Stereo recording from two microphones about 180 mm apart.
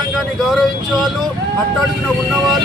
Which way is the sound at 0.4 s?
Centre (ahead or behind).